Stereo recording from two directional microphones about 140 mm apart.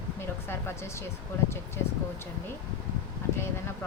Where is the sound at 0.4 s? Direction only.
20° left (ahead or behind).